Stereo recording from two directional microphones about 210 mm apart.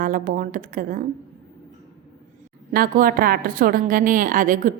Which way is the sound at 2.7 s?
45° right (ahead or behind).